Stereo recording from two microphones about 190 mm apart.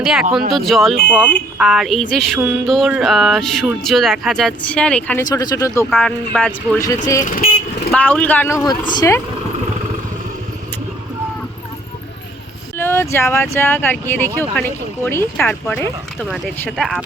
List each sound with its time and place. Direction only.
0.0 s speech: 5° right (ahead or behind)
5.2 s speech: 20° left (ahead or behind)
5.9 s speech: centre (ahead or behind)
7.3 s speech: 50° left (ahead or behind)
7.9 s speech: 10° left (ahead or behind)
12.7 s speech: 10° left (ahead or behind)
16.2 s speech: centre (ahead or behind)